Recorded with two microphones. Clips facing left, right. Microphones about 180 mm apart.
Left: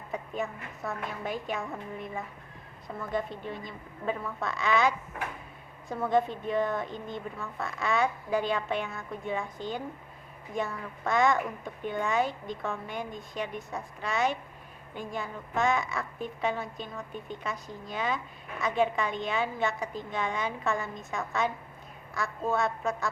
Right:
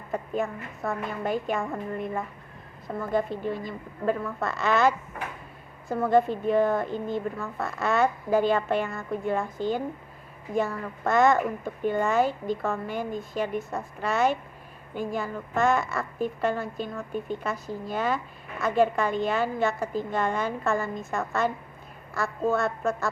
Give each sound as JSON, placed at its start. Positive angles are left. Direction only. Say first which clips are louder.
{"t": 0.1, "sound": "a woman's voice", "louder": "right 5 dB", "side_deg": 0}